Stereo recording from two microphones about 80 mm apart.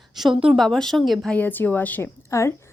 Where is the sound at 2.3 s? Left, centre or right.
Left.